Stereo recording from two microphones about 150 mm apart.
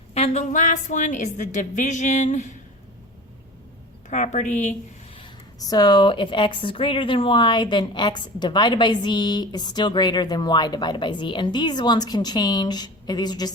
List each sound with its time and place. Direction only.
0.1 s a woman's voice: 45° left (ahead or behind)
4.1 s a woman's voice: 55° left (ahead or behind)
5.5 s a woman's voice: 25° left (ahead or behind)